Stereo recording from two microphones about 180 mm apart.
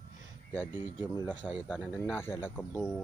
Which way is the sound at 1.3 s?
10° right (ahead or behind).